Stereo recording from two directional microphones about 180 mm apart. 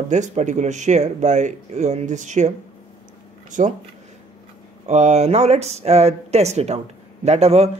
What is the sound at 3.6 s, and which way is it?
Speech, 45° right (ahead or behind).